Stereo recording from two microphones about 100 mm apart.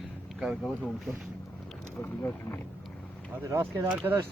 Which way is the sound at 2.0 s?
20° left (ahead or behind).